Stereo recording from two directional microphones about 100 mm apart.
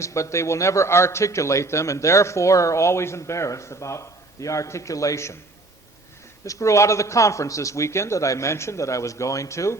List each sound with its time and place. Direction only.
0.0 s a man's voice: 30° left (ahead or behind)
6.4 s a man's voice: 30° left (ahead or behind)